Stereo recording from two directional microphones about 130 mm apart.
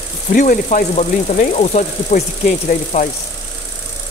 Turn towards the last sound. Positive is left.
turn(degrees=70)  # may be behind; listen again after turning